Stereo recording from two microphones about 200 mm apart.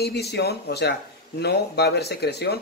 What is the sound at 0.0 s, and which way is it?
Speech, 55° left (ahead or behind).